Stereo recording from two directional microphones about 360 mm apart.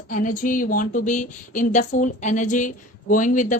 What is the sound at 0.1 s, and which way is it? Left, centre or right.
Speech, left.